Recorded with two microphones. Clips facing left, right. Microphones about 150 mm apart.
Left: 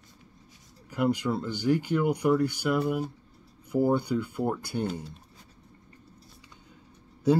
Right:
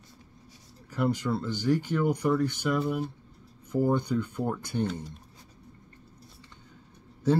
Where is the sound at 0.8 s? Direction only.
10° left (ahead or behind).